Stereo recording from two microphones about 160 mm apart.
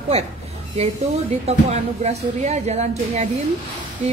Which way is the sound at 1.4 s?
40° right (ahead or behind).